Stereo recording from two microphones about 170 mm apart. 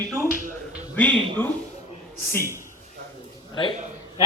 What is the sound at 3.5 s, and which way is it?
Speech, 30° left (ahead or behind).